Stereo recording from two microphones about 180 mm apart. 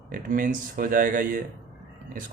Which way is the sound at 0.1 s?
50° right (ahead or behind).